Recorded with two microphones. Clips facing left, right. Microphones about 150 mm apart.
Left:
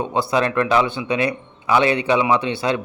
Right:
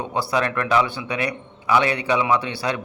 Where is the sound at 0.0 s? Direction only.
20° left (ahead or behind).